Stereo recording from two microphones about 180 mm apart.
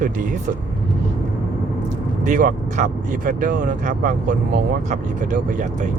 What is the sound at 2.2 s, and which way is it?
Speech, 45° right (ahead or behind).